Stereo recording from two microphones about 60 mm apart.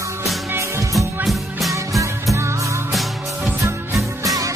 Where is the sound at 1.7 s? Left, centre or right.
Right.